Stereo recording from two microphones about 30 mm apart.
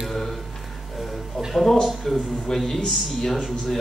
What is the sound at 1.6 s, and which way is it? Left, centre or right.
Speech, centre.